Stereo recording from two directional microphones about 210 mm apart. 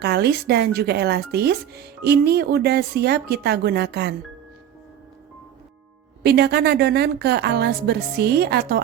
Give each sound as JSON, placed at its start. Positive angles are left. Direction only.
{"t": 0.0, "sound": "speech", "side_deg": -50}
{"t": 6.2, "sound": "speech", "side_deg": -50}